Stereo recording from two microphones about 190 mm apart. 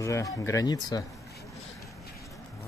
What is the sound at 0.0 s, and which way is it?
Speech, 15° left (ahead or behind).